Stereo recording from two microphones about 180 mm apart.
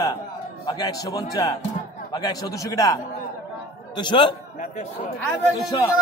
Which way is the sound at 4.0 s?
25° left (ahead or behind).